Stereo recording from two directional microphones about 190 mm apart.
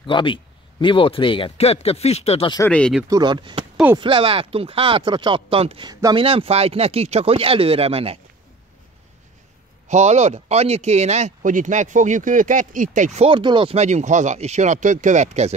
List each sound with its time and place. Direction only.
0.0 s speech: 25° left (ahead or behind)
2.6 s speech: 5° left (ahead or behind)
3.1 s speech: 20° right (ahead or behind)
5.9 s speech: 20° right (ahead or behind)
6.2 s speech: 30° right (ahead or behind)
9.8 s speech: 35° right (ahead or behind)